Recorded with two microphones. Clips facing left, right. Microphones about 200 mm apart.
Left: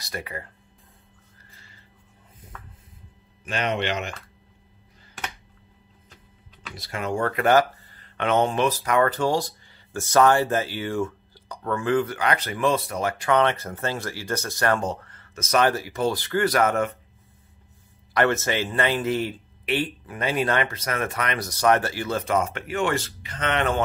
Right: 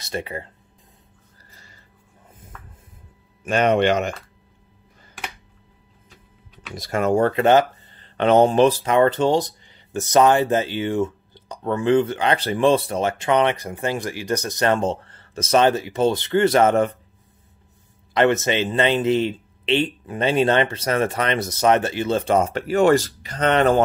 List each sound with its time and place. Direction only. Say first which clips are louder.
0.0 s speech: right 6 dB; 25° right (ahead or behind)
1.5 s music: right 4 dB; 40° right (ahead or behind)
3.4 s speech: right 9 dB; 45° right (ahead or behind)
6.7 s speech: right 9 dB; 45° right (ahead or behind)
7.2 s speech: left 1 dB; 25° right (ahead or behind)
18.1 s speech: right 4 dB; 20° right (ahead or behind); by 23.8 s 35° right (ahead or behind)